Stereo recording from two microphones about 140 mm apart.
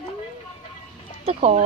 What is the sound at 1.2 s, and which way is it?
Speech, 50° right (ahead or behind).